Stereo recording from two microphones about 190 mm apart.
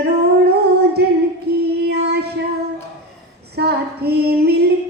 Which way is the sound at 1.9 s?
55° right (ahead or behind).